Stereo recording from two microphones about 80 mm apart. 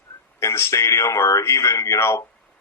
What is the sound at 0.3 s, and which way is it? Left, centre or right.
Speech, left.